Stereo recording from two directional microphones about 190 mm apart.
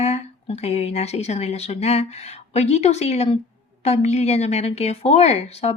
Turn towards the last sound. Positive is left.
turn(degrees=35)  # may be behind; listen again after turning